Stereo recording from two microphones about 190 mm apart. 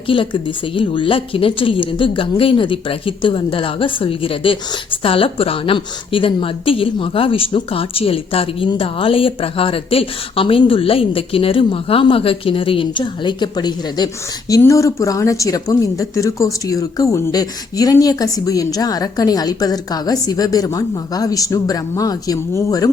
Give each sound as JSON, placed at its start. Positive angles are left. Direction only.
{"t": 0.1, "sound": "a woman's voice", "side_deg": 25}